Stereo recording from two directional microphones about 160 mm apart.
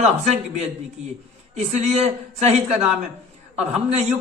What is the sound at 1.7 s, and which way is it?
Speech, 45° right (ahead or behind).